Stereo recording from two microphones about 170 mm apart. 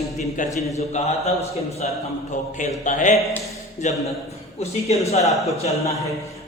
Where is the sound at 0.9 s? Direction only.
40° left (ahead or behind).